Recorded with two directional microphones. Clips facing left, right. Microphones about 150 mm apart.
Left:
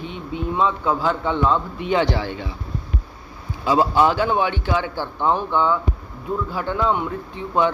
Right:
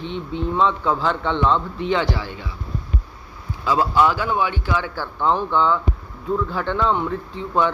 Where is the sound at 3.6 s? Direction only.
20° left (ahead or behind).